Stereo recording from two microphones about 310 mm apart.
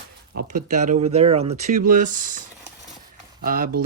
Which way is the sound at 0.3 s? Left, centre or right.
Right.